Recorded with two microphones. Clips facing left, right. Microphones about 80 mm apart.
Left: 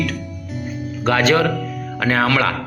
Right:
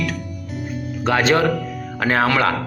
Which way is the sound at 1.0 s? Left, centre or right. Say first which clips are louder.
Left 1 dB; right.